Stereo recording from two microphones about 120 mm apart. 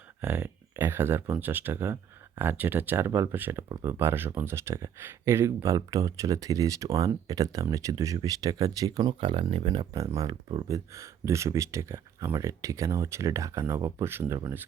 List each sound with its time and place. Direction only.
0.2 s speech: 15° right (ahead or behind); by 9.1 s 35° right (ahead or behind)
9.2 s speech: 50° right (ahead or behind)
9.9 s speech: 30° right (ahead or behind)